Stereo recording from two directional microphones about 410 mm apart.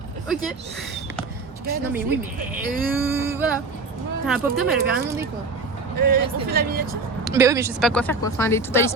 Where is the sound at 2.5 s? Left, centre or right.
Centre.